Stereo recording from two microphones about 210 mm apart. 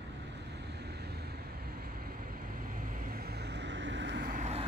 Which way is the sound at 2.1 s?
40° right (ahead or behind).